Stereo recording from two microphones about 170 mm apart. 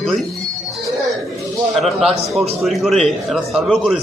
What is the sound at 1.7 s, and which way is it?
A man's voice, centre (ahead or behind).